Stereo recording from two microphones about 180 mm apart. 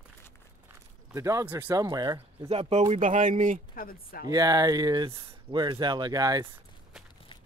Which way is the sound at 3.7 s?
50° left (ahead or behind).